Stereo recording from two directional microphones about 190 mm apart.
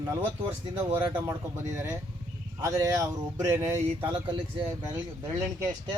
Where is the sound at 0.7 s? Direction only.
15° right (ahead or behind).